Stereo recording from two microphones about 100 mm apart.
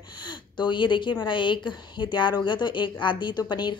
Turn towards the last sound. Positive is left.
turn(degrees=50)  # may be behind; listen again after turning